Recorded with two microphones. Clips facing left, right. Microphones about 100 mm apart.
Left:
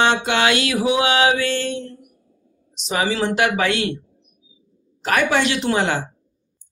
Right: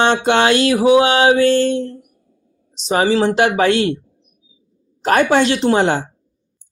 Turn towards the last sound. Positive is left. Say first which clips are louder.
# right 5 dB
turn(degrees=-35)  # may be behind; listen again after turning